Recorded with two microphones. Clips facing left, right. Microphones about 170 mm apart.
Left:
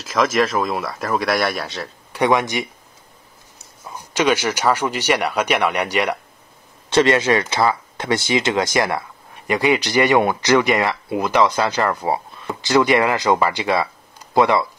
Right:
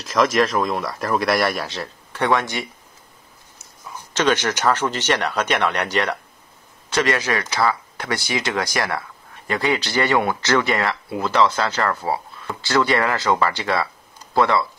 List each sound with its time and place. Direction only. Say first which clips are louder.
0.0 s speech: even; centre (ahead or behind)
2.1 s speech: left 3 dB; 15° left (ahead or behind)
3.9 s speech: left 1 dB; 10° left (ahead or behind)
6.9 s speech: left 5 dB; 25° left (ahead or behind)